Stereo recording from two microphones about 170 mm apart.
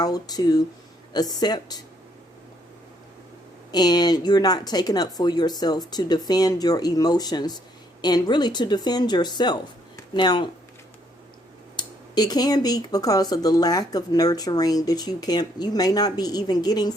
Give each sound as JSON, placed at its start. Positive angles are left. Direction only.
{"t": 0.0, "sound": "speech", "side_deg": 20}
{"t": 3.7, "sound": "speech", "side_deg": 25}
{"t": 11.8, "sound": "speech", "side_deg": 25}